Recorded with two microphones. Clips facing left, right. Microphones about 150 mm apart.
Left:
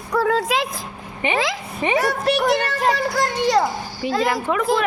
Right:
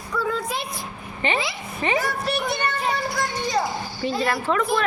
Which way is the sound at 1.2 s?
10° left (ahead or behind).